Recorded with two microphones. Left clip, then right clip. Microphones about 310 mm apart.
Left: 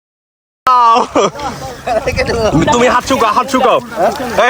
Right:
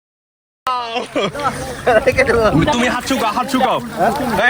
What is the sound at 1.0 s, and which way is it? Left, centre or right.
Speech, left.